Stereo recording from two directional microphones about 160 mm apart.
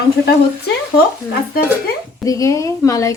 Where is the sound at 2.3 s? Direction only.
20° left (ahead or behind).